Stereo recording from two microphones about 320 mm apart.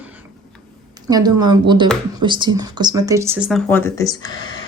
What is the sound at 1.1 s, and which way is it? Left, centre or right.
Speech, centre.